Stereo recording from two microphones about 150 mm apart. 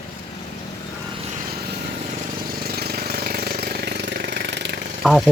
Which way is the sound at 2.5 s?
90° right.